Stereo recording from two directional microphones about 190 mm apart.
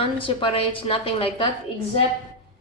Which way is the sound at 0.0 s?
25° left (ahead or behind).